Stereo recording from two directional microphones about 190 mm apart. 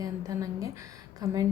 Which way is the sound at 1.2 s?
20° right (ahead or behind).